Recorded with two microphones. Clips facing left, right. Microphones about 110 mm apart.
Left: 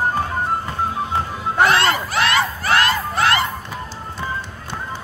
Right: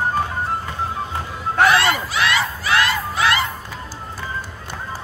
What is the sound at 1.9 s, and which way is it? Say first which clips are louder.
Crowd: left 2 dB; 50° left (ahead or behind).